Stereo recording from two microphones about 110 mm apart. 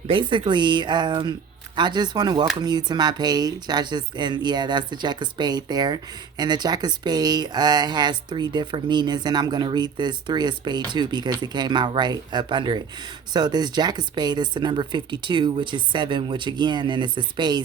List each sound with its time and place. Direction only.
0.1 s speech: 50° right (ahead or behind)